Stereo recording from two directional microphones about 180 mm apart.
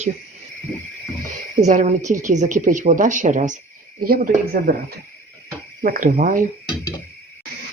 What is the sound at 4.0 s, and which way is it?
Speech, 55° right (ahead or behind).